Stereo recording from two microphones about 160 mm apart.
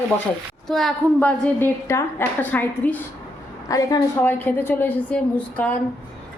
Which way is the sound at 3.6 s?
20° left (ahead or behind).